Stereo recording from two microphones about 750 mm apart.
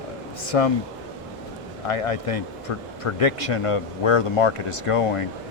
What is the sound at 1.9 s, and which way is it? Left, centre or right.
Speech, left.